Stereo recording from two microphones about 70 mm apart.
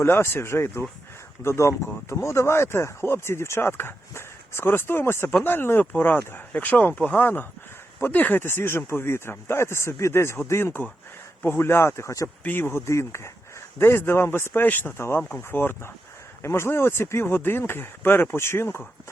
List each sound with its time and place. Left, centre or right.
0.0 s speech: left
5.8 s speech: centre; by 12.1 s left
12.4 s speech: left
12.9 s speech: left